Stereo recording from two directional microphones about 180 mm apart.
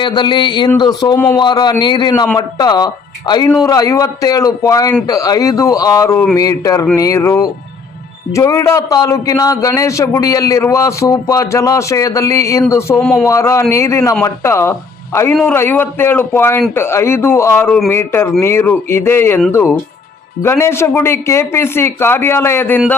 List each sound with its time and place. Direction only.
0.0 s a man's voice: 25° left (ahead or behind)
1.1 s a man's voice: 10° left (ahead or behind)
1.4 s a man's voice: 25° left (ahead or behind)
13.0 s a man's voice: 5° left (ahead or behind)
13.2 s a man's voice: 15° left (ahead or behind)